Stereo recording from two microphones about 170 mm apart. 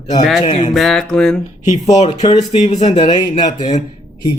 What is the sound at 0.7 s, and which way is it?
Music, centre (ahead or behind).